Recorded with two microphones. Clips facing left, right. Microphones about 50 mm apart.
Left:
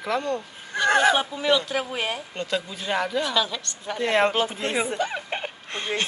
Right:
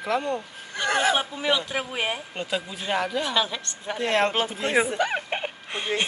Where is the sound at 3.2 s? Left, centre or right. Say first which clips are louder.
Left 1 dB; centre.